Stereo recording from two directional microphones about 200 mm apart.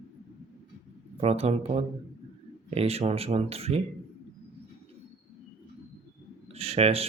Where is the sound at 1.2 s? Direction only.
30° right (ahead or behind).